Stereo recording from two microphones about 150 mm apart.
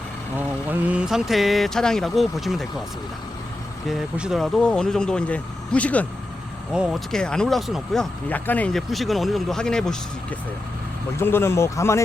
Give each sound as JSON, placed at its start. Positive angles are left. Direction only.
{"t": 0.3, "sound": "speech", "side_deg": -10}
{"t": 3.8, "sound": "speech", "side_deg": -5}
{"t": 11.2, "sound": "speech", "side_deg": 15}